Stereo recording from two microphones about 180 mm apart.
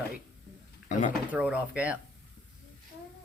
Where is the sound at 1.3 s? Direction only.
5° right (ahead or behind).